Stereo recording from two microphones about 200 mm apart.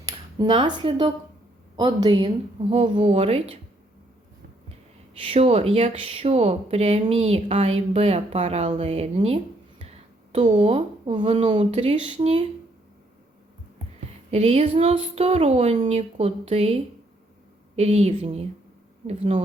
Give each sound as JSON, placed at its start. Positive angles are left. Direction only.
{"t": 0.0, "sound": "speech", "side_deg": -20}
{"t": 5.1, "sound": "speech", "side_deg": -30}
{"t": 14.3, "sound": "speech", "side_deg": -30}